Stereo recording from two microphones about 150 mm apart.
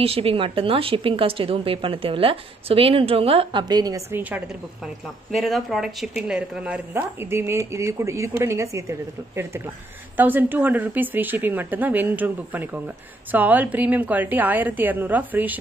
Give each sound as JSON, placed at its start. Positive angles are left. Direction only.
{"t": 0.0, "sound": "a woman's voice", "side_deg": -40}
{"t": 4.1, "sound": "speech", "side_deg": -10}
{"t": 5.3, "sound": "speech", "side_deg": 0}